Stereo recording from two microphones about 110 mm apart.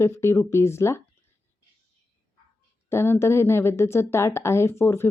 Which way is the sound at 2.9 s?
20° left (ahead or behind).